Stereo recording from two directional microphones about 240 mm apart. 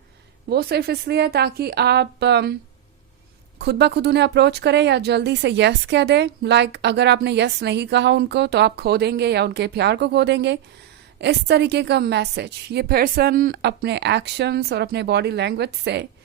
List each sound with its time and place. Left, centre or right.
0.5 s speech: right
3.6 s speech: right